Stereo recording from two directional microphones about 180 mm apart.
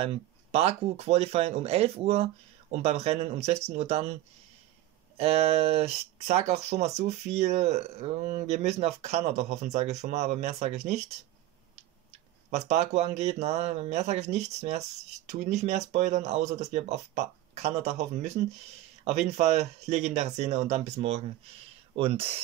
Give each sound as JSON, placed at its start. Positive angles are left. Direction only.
{"t": 0.0, "sound": "speech", "side_deg": -35}
{"t": 12.4, "sound": "speech", "side_deg": -40}